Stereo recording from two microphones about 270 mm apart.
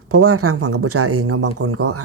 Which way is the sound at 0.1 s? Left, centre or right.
Right.